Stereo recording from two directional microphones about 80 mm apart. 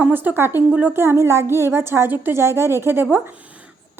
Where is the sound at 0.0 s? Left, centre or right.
Right.